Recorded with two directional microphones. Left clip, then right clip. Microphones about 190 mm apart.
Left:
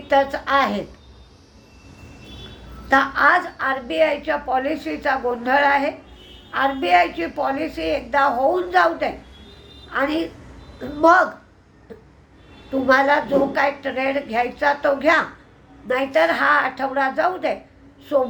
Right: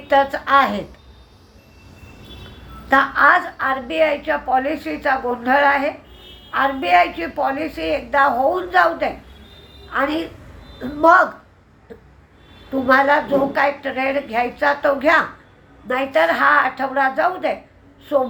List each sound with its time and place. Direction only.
0.1 s a woman's voice: 10° left (ahead or behind)
2.9 s a woman's voice: 10° left (ahead or behind)
11.9 s a sound: 10° left (ahead or behind)
12.9 s a woman's voice: 10° left (ahead or behind)